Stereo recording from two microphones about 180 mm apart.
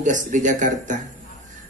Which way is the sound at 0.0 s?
45° right (ahead or behind).